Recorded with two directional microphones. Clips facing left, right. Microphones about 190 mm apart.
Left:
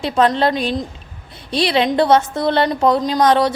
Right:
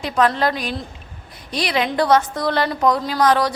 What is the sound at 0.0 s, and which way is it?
A woman's voice, 25° left (ahead or behind).